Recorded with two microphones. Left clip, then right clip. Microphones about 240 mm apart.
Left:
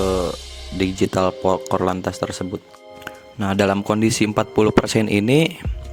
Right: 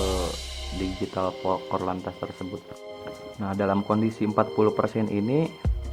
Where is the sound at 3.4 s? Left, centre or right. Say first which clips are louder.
Left 7 dB; left.